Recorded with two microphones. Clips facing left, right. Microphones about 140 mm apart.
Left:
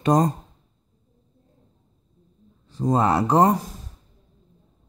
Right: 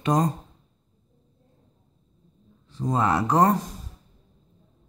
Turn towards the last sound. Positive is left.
turn(degrees=30)  # may be behind; listen again after turning